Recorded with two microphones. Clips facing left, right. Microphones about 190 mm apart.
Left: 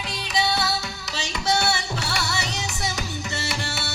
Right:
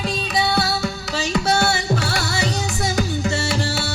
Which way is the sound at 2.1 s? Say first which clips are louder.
Right 5 dB; 50° right (ahead or behind).